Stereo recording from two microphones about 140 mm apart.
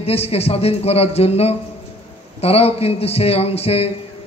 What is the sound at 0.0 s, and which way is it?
A man's voice, 45° left (ahead or behind).